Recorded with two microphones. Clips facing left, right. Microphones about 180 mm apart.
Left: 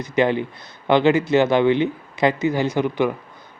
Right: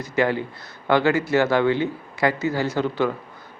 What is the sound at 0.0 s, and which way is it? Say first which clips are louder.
Speech: left 3 dB; 20° left (ahead or behind).